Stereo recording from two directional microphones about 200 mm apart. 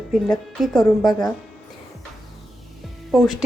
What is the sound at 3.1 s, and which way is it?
Speech, centre (ahead or behind).